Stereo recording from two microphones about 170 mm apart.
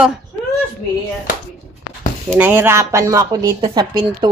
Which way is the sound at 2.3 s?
10° right (ahead or behind).